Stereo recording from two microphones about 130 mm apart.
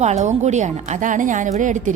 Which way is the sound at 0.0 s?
60° right (ahead or behind).